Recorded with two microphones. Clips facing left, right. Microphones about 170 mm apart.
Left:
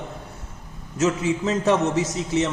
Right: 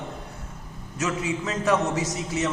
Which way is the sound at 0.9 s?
25° left (ahead or behind).